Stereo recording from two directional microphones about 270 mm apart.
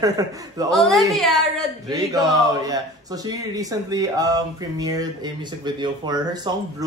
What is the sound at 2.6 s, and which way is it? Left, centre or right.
Speech, centre.